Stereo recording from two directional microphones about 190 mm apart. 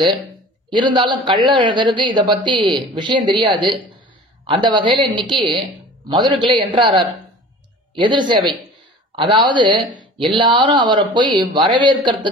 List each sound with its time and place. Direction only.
0.7 s speech: 25° right (ahead or behind)